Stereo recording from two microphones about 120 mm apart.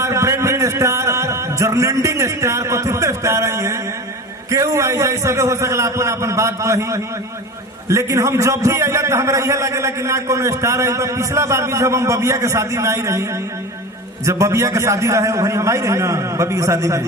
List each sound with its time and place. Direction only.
0.0 s a sound: 25° right (ahead or behind)
4.5 s a man's voice: 25° right (ahead or behind)
14.3 s a man's voice: 25° right (ahead or behind)